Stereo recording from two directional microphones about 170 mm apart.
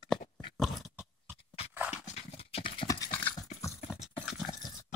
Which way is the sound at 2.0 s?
40° left (ahead or behind).